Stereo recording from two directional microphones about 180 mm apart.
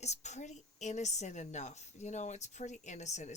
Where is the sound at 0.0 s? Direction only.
40° left (ahead or behind).